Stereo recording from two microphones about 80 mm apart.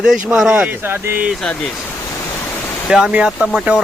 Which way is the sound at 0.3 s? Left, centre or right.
Centre.